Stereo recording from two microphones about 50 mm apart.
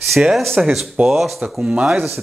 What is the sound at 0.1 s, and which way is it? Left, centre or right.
Speech, centre.